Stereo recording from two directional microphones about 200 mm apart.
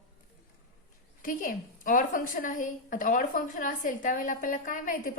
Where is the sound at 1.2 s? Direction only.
45° left (ahead or behind).